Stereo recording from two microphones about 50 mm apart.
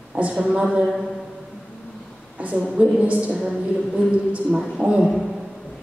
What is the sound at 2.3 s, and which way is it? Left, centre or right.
A woman's voice, right.